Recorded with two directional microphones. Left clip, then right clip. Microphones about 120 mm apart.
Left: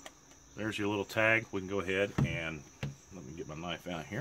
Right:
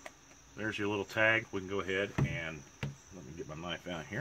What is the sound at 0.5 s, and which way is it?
Speech, 30° left (ahead or behind).